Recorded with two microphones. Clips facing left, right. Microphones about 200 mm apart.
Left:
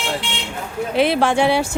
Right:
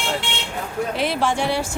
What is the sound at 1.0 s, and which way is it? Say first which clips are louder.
Speech: left 7 dB; 65° left (ahead or behind).